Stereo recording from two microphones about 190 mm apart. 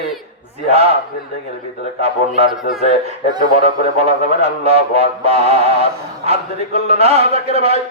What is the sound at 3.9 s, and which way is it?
Music, 35° right (ahead or behind).